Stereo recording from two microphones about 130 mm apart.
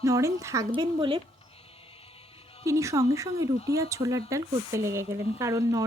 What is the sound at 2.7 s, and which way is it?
Speech, 25° right (ahead or behind).